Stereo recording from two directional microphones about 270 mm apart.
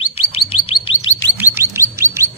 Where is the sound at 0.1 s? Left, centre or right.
Left.